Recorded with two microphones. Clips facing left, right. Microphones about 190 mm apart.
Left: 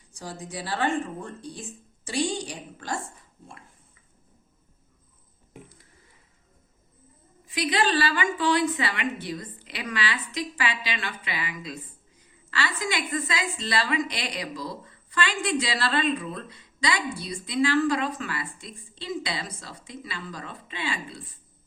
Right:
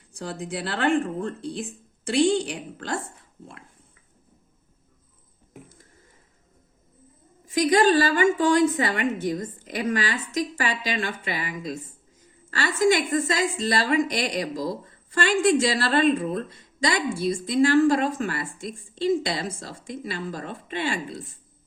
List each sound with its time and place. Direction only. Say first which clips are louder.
0.1 s a woman's voice: right 5 dB; 60° right (ahead or behind)
7.4 s a woman's voice: right 7 dB; 45° right (ahead or behind)